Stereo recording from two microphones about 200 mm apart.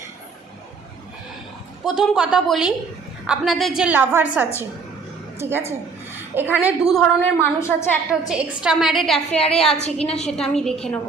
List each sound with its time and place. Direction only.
1.8 s a woman's voice: centre (ahead or behind)
5.4 s a woman's voice: 10° right (ahead or behind)
7.2 s a woman's voice: 10° left (ahead or behind)
8.3 s a woman's voice: 5° right (ahead or behind)
9.8 s a woman's voice: 30° left (ahead or behind)
10.2 s a woman's voice: 5° left (ahead or behind)